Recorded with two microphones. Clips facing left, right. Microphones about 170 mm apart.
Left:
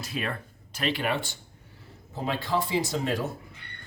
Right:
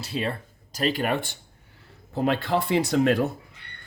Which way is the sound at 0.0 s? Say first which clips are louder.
Right 4 dB; 30° right (ahead or behind).